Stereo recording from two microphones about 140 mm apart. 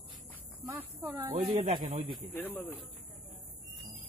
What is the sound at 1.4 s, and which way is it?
Speech, 35° right (ahead or behind).